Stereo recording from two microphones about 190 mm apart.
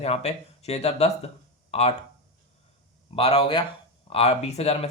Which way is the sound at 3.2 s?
30° left (ahead or behind).